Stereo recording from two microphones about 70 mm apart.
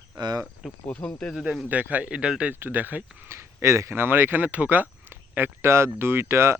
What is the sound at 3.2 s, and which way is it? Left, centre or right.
Speech, right.